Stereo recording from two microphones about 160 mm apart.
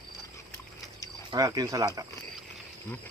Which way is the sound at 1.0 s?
20° right (ahead or behind).